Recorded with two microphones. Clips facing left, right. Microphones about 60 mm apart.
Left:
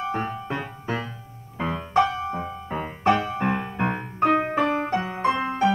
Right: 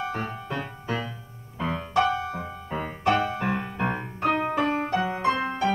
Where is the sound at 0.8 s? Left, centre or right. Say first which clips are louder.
Left 1 dB; centre.